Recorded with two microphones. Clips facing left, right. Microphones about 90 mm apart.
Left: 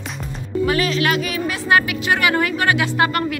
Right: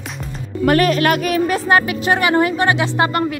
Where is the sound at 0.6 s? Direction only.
50° right (ahead or behind); by 3.4 s 25° right (ahead or behind).